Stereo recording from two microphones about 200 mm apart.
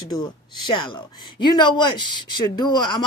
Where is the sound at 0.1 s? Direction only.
20° left (ahead or behind).